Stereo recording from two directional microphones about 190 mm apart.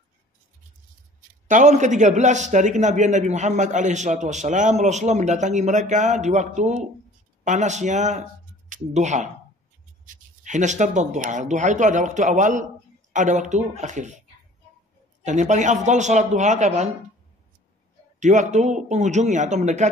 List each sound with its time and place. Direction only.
1.5 s a man's voice: 40° right (ahead or behind)
15.2 s a man's voice: 40° right (ahead or behind)
18.2 s a man's voice: 40° right (ahead or behind)